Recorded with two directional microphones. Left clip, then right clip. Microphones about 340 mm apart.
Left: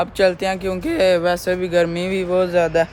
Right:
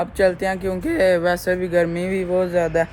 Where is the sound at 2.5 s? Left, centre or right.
Centre.